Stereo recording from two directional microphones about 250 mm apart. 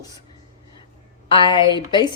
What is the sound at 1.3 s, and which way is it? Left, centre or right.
Speech, centre.